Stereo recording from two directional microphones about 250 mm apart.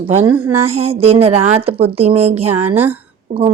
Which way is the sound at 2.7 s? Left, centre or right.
Centre.